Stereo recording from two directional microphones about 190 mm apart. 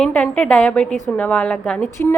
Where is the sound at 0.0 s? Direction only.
5° left (ahead or behind).